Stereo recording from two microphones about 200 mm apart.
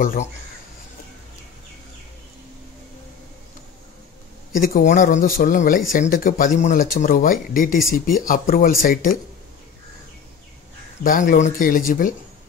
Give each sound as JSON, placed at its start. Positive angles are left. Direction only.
{"t": 0.0, "sound": "speech", "side_deg": 45}
{"t": 4.6, "sound": "speech", "side_deg": 40}
{"t": 11.1, "sound": "speech", "side_deg": 40}